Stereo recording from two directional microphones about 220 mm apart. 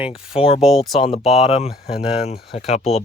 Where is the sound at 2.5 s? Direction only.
30° left (ahead or behind).